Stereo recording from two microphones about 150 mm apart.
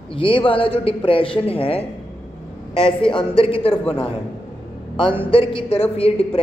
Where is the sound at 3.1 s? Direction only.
35° left (ahead or behind).